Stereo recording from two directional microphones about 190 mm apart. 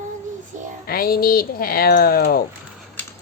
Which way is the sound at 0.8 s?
50° left (ahead or behind).